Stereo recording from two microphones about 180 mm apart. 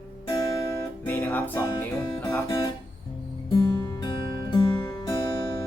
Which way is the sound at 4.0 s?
25° left (ahead or behind).